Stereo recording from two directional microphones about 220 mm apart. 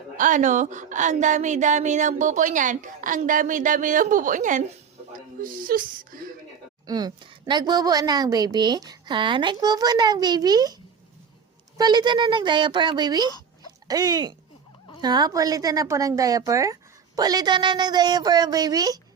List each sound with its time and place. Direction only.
0.2 s a woman's voice: 35° right (ahead or behind)
6.8 s a woman's voice: 20° right (ahead or behind)
11.8 s a woman's voice: 20° right (ahead or behind)